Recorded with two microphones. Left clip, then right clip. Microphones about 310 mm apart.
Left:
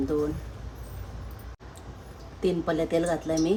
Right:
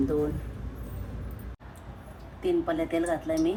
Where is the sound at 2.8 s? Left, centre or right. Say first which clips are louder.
Left 3 dB; left.